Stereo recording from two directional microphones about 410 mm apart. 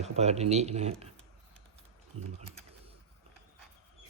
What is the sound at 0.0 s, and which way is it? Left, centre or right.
Speech, centre.